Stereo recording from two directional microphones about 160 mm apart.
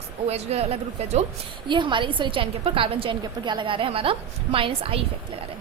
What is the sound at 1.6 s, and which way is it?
A woman's voice, 30° right (ahead or behind).